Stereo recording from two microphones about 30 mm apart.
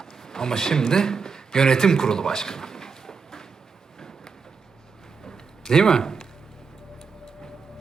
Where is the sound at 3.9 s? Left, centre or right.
Centre.